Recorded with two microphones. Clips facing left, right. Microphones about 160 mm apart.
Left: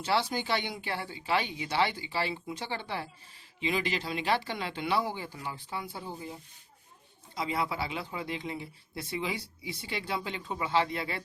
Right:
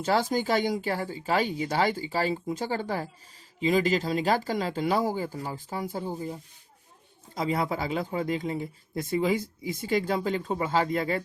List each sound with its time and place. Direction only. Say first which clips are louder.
0.0 s speech: right 5 dB; 45° right (ahead or behind)
7.3 s speech: right 4 dB; 45° right (ahead or behind)